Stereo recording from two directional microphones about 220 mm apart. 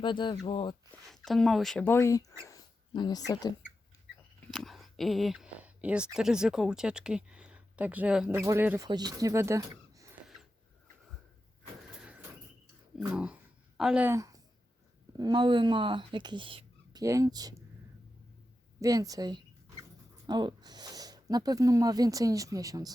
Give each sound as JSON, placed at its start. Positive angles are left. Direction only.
{"t": 0.0, "sound": "speech", "side_deg": 20}
{"t": 1.0, "sound": "speech", "side_deg": 0}
{"t": 4.5, "sound": "speech", "side_deg": 0}
{"t": 11.9, "sound": "vehicle", "side_deg": -5}
{"t": 13.1, "sound": "a sound", "side_deg": -5}
{"t": 15.2, "sound": "speech", "side_deg": -20}
{"t": 18.8, "sound": "a sound", "side_deg": -15}
{"t": 20.2, "sound": "speech", "side_deg": -20}